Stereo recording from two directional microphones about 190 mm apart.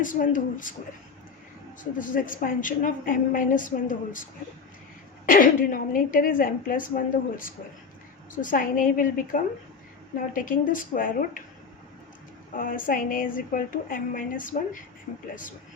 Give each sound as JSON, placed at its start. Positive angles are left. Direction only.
{"t": 0.0, "sound": "a woman's voice", "side_deg": 45}
{"t": 1.8, "sound": "a woman's voice", "side_deg": 45}
{"t": 5.2, "sound": "a woman's voice", "side_deg": 45}
{"t": 12.5, "sound": "a woman's voice", "side_deg": 45}